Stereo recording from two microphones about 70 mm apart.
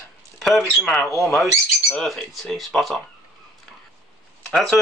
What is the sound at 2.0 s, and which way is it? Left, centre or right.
Speech, centre.